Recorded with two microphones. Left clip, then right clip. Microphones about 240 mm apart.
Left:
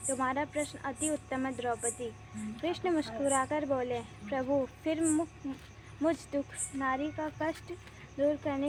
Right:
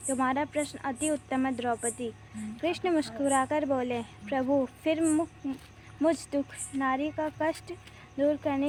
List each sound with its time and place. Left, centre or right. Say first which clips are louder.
0.1 s a woman's voice: right 4 dB; right